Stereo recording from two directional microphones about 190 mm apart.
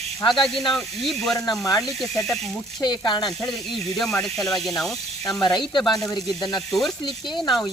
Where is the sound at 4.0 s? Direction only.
5° left (ahead or behind).